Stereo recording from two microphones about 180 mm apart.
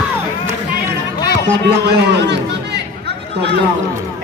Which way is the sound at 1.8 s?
70° right (ahead or behind).